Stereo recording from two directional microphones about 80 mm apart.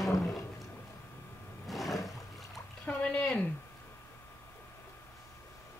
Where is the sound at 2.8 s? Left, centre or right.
Centre.